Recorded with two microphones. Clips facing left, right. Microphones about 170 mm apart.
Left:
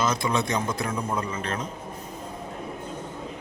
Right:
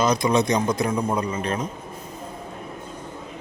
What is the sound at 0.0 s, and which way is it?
Speech, 15° right (ahead or behind).